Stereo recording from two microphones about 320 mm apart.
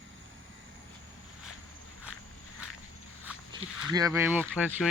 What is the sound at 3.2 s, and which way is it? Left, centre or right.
Speech, centre.